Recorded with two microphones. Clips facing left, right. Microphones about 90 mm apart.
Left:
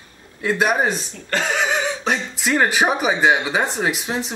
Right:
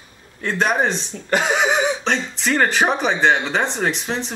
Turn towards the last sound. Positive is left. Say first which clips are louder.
# even
turn(degrees=5)  # may be behind; listen again after turning